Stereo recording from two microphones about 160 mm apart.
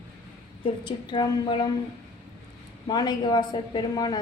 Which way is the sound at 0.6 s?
30° left (ahead or behind).